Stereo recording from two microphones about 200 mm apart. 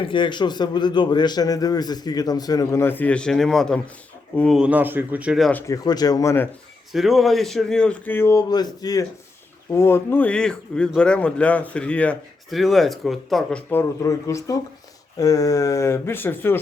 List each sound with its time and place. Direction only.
0.0 s a man's voice: 25° left (ahead or behind); by 5.5 s 5° right (ahead or behind)
5.5 s a man's voice: 10° left (ahead or behind)
6.9 s a man's voice: centre (ahead or behind)